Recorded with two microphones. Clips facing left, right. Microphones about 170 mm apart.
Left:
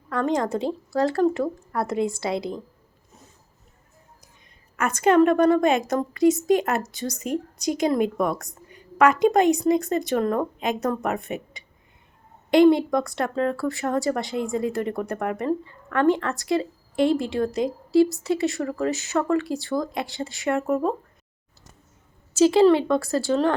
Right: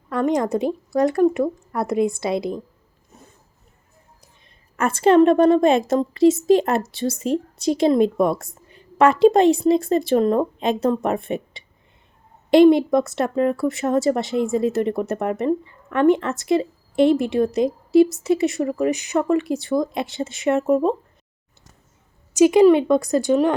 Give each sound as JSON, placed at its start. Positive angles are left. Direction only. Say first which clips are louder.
{"t": 0.1, "sound": "speech", "louder": "right 3 dB", "side_deg": -20}
{"t": 4.8, "sound": "speech", "louder": "right 3 dB", "side_deg": -30}
{"t": 22.4, "sound": "speech", "louder": "right 3 dB", "side_deg": -15}